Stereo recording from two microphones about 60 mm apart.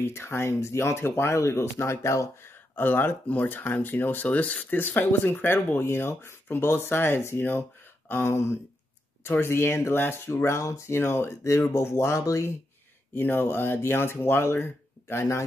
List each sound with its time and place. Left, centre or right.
0.0 s speech: left
2.7 s speech: left
11.0 s speech: left
13.1 s speech: left